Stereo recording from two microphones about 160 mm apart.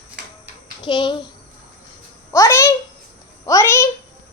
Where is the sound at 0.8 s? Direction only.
30° left (ahead or behind).